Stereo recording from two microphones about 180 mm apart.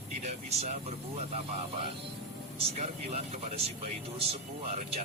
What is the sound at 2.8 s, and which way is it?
Speech, 35° right (ahead or behind).